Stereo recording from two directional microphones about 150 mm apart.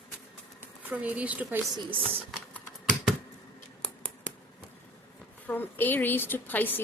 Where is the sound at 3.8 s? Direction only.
5° left (ahead or behind).